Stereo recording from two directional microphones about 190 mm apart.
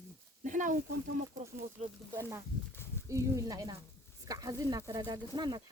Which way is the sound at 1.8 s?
35° right (ahead or behind).